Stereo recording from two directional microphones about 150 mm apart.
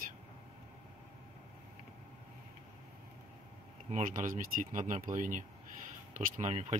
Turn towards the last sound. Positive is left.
turn(degrees=-50)  # may be behind; listen again after turning